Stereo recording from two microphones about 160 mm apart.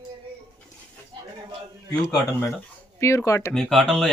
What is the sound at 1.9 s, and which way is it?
Speech, 20° left (ahead or behind).